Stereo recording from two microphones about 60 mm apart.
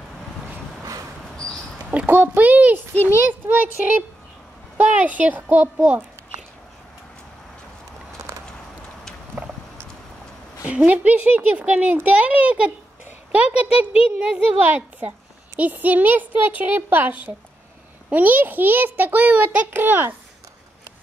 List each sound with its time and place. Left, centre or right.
2.0 s a child's voice: right
9.4 s rowboat: centre
10.9 s a child's voice: right
14.6 s a child's voice: right